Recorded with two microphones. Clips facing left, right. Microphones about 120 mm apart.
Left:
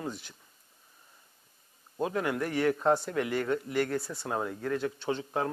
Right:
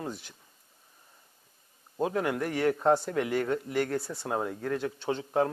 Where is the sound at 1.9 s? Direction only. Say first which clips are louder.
Right 1 dB; 20° right (ahead or behind).